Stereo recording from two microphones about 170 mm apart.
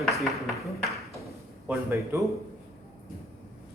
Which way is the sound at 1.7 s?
15° right (ahead or behind).